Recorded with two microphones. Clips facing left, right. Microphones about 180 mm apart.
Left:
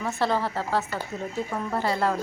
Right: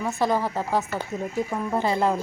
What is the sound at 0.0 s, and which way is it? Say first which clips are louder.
A woman's voice: right 2 dB; 15° right (ahead or behind).